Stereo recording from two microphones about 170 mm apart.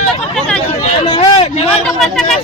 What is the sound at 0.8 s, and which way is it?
Speech, 35° left (ahead or behind).